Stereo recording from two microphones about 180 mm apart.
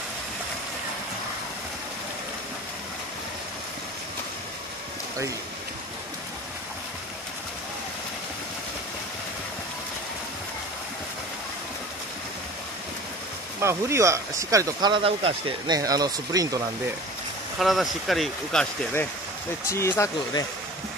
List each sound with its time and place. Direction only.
13.6 s speech: 15° right (ahead or behind)
17.6 s speech: centre (ahead or behind)
19.7 s speech: 15° left (ahead or behind)